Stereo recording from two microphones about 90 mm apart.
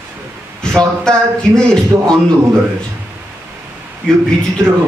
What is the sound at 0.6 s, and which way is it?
A man's voice, 10° left (ahead or behind).